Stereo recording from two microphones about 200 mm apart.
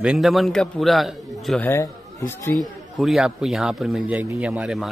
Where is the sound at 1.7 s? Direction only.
15° left (ahead or behind).